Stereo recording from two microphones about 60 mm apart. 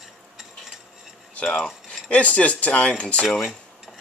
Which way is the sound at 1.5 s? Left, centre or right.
Centre.